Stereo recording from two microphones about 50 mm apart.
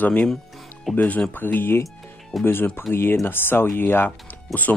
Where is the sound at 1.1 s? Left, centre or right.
Left.